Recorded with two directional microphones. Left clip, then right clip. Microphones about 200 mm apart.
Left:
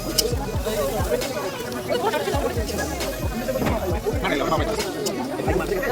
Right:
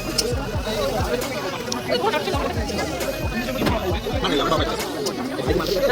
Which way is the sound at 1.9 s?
15° left (ahead or behind).